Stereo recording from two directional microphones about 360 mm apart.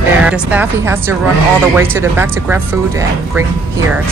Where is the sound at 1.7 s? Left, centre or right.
Centre.